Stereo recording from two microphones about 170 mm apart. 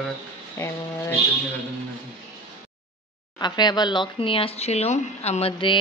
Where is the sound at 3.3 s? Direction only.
25° left (ahead or behind).